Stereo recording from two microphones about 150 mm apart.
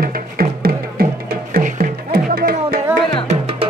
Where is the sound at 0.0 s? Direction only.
75° right (ahead or behind).